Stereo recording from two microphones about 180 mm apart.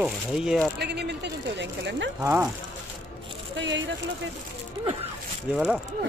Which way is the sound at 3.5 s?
85° right.